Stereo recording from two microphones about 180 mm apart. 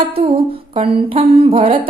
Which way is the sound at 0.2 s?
35° right (ahead or behind).